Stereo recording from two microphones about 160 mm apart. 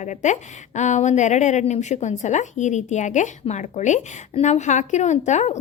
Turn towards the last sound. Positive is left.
turn(degrees=45)  # may be behind; listen again after turning